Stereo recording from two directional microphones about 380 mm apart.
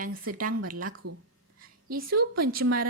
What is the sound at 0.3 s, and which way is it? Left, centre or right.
Speech, right.